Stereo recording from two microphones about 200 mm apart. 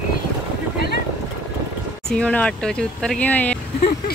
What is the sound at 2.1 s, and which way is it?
Speech, 5° left (ahead or behind).